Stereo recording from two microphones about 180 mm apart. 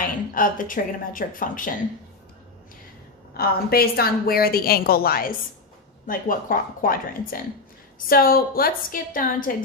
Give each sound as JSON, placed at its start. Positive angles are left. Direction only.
{"t": 0.3, "sound": "a woman's voice", "side_deg": 50}
{"t": 3.3, "sound": "a woman's voice", "side_deg": 55}